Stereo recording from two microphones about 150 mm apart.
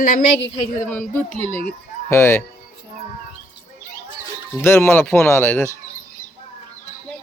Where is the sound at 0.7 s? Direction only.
15° left (ahead or behind).